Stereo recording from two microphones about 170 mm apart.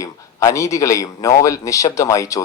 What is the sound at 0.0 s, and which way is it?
Speech, 20° left (ahead or behind).